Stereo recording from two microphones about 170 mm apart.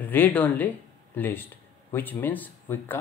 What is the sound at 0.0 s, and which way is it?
Speech, 10° left (ahead or behind).